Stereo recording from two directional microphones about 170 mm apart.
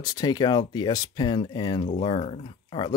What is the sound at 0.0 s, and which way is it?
Speech, 20° left (ahead or behind).